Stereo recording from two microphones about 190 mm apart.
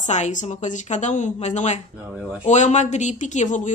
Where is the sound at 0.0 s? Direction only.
40° left (ahead or behind).